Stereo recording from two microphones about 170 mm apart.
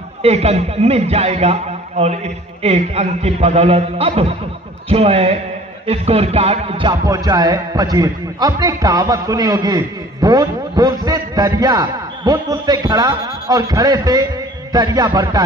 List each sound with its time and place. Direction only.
0.2 s a man's voice: 40° right (ahead or behind); by 15.4 s 20° right (ahead or behind)